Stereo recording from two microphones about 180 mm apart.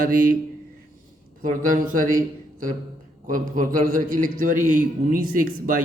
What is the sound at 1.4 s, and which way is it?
A man's voice, 50° right (ahead or behind).